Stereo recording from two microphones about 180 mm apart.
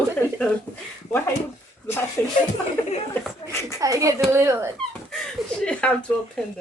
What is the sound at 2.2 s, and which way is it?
Music, 10° left (ahead or behind).